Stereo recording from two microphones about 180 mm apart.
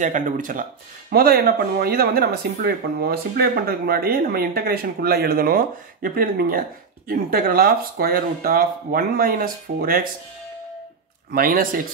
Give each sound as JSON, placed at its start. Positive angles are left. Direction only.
{"t": 0.0, "sound": "speech", "side_deg": -45}
{"t": 11.3, "sound": "speech", "side_deg": -55}